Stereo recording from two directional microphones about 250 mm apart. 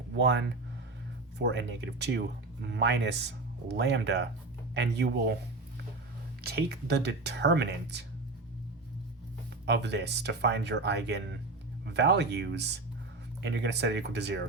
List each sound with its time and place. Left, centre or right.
0.1 s speech: right
6.4 s speech: right
9.6 s speech: right